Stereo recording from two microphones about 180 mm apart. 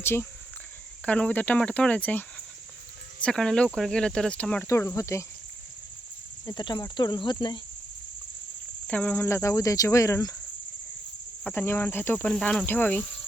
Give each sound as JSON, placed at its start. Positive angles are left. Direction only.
{"t": 0.0, "sound": "cricket", "side_deg": 15}
{"t": 3.2, "sound": "speech", "side_deg": 5}
{"t": 4.7, "sound": "cricket", "side_deg": 15}
{"t": 6.4, "sound": "speech", "side_deg": 25}
{"t": 8.9, "sound": "cricket", "side_deg": 10}
{"t": 11.4, "sound": "cricket", "side_deg": 15}